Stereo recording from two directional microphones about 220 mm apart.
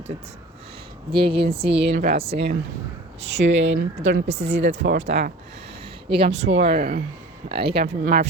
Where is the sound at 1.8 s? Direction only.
45° right (ahead or behind).